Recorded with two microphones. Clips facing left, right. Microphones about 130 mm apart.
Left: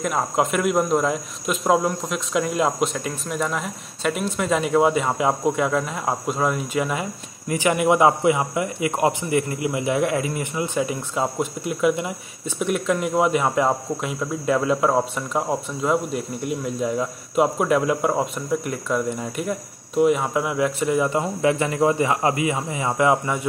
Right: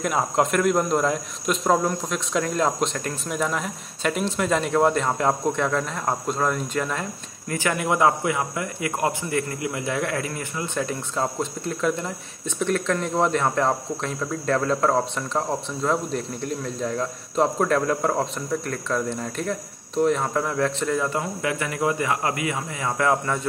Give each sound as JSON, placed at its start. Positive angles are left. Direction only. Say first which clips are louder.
{"t": 0.0, "sound": "speech", "louder": "even", "side_deg": 0}